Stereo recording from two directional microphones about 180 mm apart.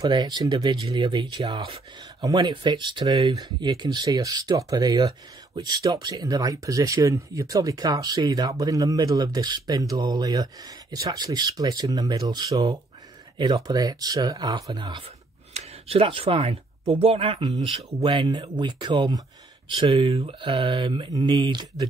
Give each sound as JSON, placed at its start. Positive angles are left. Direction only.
{"t": 0.0, "sound": "speech", "side_deg": -25}